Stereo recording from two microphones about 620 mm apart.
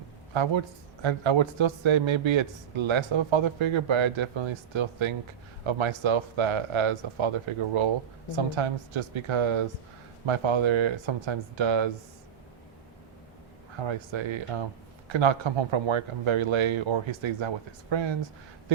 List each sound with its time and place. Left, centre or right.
1.0 s speech: right
13.7 s speech: right